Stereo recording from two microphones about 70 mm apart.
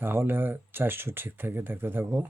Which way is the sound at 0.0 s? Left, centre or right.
Right.